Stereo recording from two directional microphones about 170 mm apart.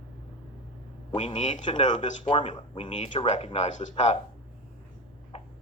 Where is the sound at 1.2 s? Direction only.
40° left (ahead or behind).